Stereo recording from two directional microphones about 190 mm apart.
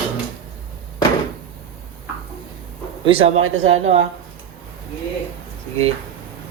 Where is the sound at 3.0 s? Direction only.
30° right (ahead or behind).